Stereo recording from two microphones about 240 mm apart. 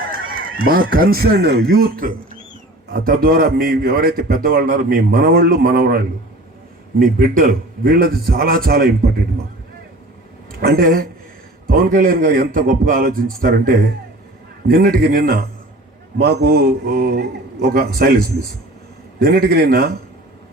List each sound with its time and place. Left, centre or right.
0.3 s a sound: right
0.6 s a man's voice: right
7.0 s a man's voice: right
10.6 s a man's voice: right